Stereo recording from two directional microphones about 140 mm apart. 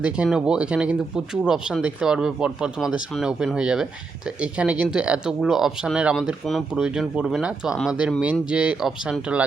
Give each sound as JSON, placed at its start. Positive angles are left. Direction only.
{"t": 0.0, "sound": "speech", "side_deg": -5}